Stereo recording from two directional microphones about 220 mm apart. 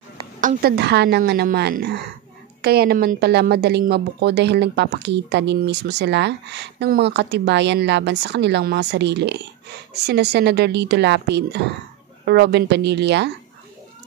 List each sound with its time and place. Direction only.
0.4 s speech: 40° right (ahead or behind)